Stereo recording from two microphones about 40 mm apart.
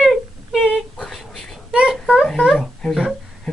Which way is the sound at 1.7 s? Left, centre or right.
Right.